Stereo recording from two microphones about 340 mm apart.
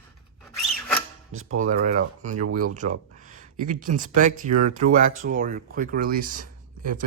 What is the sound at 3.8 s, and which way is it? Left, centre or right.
Speech, right.